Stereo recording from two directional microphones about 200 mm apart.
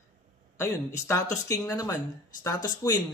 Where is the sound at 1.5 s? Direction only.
15° left (ahead or behind).